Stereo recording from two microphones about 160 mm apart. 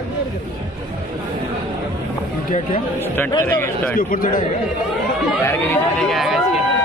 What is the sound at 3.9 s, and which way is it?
Speech, 60° left (ahead or behind).